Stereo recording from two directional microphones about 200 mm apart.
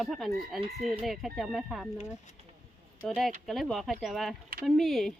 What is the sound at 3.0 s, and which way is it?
Speech, centre (ahead or behind).